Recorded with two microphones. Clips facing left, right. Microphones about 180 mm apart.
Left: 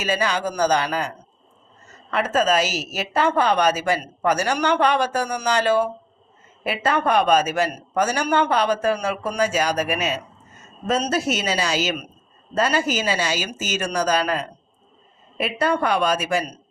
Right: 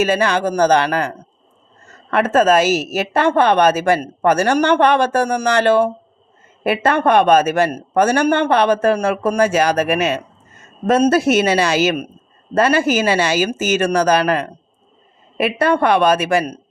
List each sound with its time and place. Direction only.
0.0 s a woman's voice: 50° right (ahead or behind)